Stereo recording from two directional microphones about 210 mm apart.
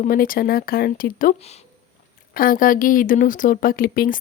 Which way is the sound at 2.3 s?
40° left (ahead or behind).